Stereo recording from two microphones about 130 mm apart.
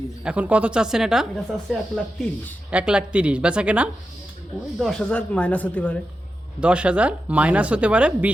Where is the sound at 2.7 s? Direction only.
10° right (ahead or behind).